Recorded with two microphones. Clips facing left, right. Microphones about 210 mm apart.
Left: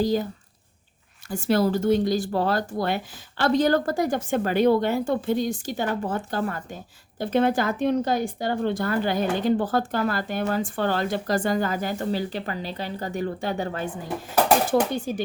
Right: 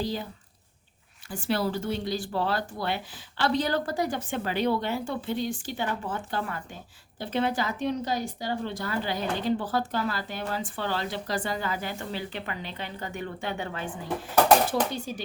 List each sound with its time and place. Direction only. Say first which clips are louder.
0.0 s speech: left 8 dB; 45° left (ahead or behind)
1.3 s speech: left 6 dB; 45° left (ahead or behind)
14.7 s speech: left 6 dB; 50° left (ahead or behind)